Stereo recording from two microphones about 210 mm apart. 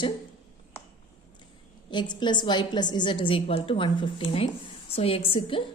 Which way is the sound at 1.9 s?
20° left (ahead or behind).